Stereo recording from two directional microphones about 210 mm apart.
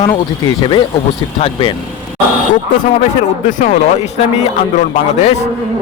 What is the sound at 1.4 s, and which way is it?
Speech, 30° left (ahead or behind).